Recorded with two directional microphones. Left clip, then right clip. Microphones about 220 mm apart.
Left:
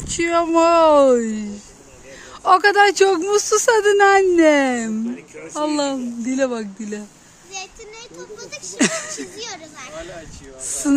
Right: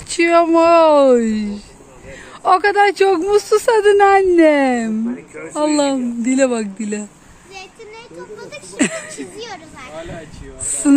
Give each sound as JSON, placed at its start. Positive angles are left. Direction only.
{"t": 0.1, "sound": "speech", "side_deg": 0}
{"t": 8.4, "sound": "speech", "side_deg": 45}
{"t": 8.7, "sound": "speech", "side_deg": 0}
{"t": 9.4, "sound": "a sound", "side_deg": 45}